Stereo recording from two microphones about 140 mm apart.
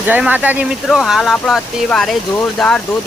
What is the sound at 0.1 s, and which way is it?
Speech, 10° right (ahead or behind).